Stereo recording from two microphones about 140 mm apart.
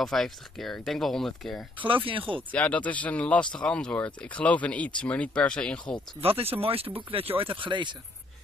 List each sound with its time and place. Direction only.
0.0 s speech: centre (ahead or behind)
2.0 s speech: 40° right (ahead or behind)
2.5 s speech: 10° left (ahead or behind)
6.2 s speech: 45° right (ahead or behind)